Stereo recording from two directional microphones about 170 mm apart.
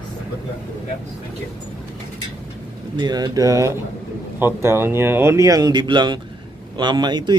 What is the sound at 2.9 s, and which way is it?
Speech, 25° right (ahead or behind).